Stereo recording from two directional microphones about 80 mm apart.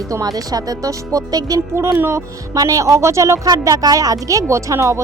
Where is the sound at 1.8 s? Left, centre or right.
Right.